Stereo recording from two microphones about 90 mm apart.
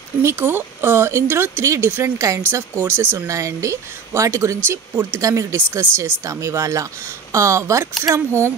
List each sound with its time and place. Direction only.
0.2 s speech: 30° right (ahead or behind)
3.3 s speech: 35° right (ahead or behind)